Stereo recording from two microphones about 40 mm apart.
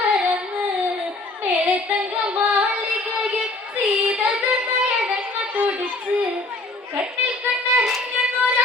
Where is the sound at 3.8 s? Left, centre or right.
Right.